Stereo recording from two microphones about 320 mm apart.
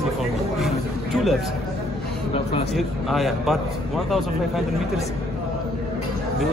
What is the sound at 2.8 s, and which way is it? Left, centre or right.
Speech, centre.